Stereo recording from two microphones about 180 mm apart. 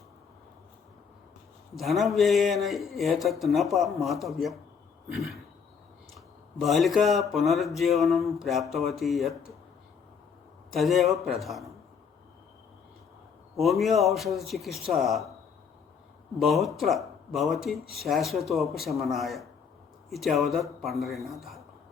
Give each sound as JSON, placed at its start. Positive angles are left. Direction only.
{"t": 1.7, "sound": "speech", "side_deg": 0}
{"t": 10.7, "sound": "speech", "side_deg": 0}
{"t": 13.6, "sound": "speech", "side_deg": 0}
{"t": 16.4, "sound": "speech", "side_deg": 0}